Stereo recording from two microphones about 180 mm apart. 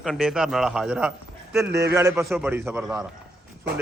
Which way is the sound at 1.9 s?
20° right (ahead or behind).